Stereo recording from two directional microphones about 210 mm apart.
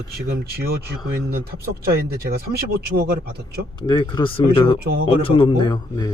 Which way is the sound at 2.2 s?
50° right (ahead or behind).